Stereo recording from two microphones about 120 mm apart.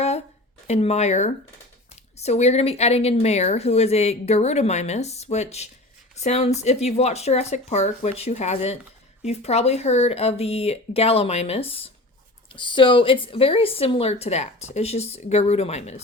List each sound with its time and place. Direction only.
0.7 s speech: 65° left (ahead or behind)
12.5 s speech: 45° left (ahead or behind); by 16.0 s 65° left (ahead or behind)